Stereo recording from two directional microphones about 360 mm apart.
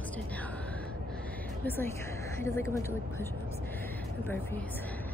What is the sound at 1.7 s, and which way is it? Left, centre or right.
Speech, centre.